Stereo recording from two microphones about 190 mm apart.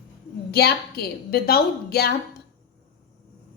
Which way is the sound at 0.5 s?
55° left (ahead or behind).